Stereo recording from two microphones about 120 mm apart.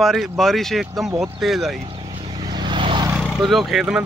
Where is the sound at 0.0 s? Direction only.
Centre (ahead or behind).